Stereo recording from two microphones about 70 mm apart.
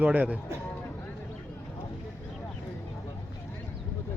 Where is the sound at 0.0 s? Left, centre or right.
Right.